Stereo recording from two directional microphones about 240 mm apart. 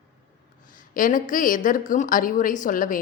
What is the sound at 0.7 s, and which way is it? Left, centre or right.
Speech, left.